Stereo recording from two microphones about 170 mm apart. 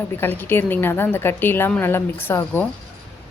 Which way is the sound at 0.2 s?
10° left (ahead or behind).